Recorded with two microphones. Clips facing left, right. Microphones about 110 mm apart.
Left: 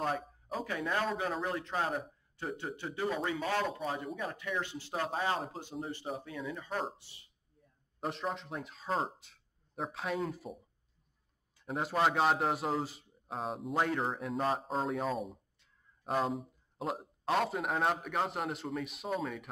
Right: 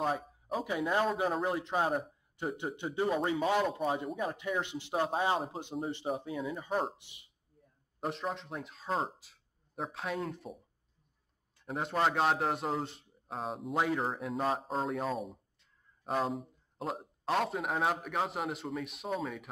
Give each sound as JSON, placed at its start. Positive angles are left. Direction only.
{"t": 0.0, "sound": "a sound", "side_deg": -5}
{"t": 0.7, "sound": "speech", "side_deg": -20}
{"t": 6.3, "sound": "speech", "side_deg": -5}
{"t": 8.0, "sound": "a man's voice", "side_deg": 0}